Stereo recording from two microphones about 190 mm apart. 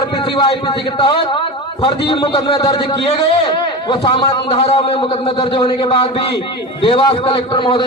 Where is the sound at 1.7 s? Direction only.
25° left (ahead or behind).